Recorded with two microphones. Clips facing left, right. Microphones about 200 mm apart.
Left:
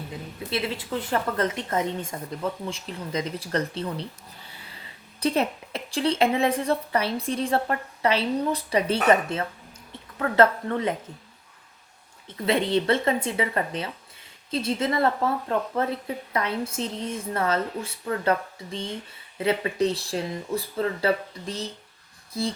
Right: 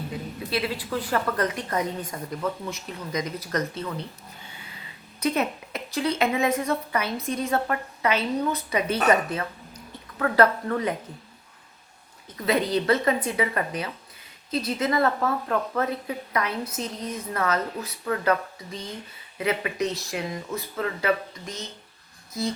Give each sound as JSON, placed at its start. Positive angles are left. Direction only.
{"t": 0.1, "sound": "a woman's voice", "side_deg": 25}
{"t": 5.2, "sound": "a woman's voice", "side_deg": 30}
{"t": 12.5, "sound": "a woman's voice", "side_deg": 25}